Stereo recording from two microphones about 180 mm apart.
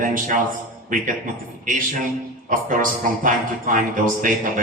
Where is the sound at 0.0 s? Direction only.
45° right (ahead or behind).